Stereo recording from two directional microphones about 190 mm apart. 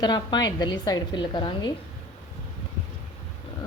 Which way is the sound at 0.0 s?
20° left (ahead or behind).